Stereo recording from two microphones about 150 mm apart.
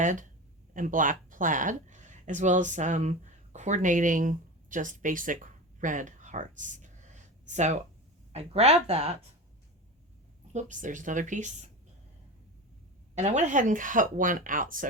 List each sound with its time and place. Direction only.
0.0 s speech: 55° right (ahead or behind)
10.5 s speech: 55° right (ahead or behind)
13.1 s speech: 50° right (ahead or behind)